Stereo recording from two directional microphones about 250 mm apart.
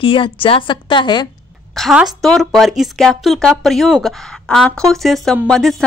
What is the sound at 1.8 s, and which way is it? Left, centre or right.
A woman's voice, centre.